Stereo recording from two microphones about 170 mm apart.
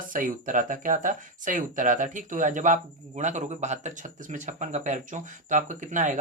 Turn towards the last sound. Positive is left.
turn(degrees=-45)  # may be behind; listen again after turning